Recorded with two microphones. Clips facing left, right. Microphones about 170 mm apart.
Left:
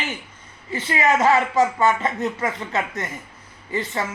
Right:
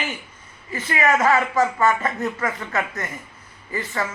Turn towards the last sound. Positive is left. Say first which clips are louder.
# left 1 dB
turn(degrees=25)  # may be behind; listen again after turning